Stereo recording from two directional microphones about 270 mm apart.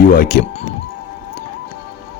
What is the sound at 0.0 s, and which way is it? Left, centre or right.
Speech, left.